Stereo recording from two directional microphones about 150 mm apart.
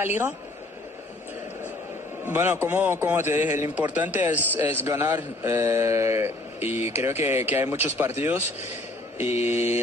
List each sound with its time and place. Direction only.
0.0 s a man's voice: 15° right (ahead or behind)
2.2 s a man's voice: 15° right (ahead or behind)
9.2 s mantra: 50° left (ahead or behind)